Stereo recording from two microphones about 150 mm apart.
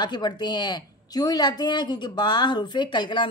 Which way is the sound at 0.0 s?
30° left (ahead or behind).